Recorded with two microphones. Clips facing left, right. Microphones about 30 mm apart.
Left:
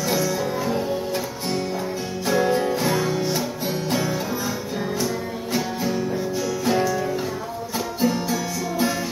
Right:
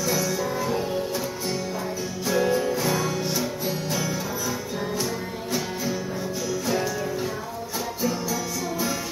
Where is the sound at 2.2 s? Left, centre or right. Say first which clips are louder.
Left 2 dB; left.